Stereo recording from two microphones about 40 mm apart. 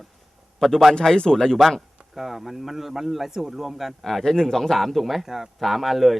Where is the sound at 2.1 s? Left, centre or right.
Centre.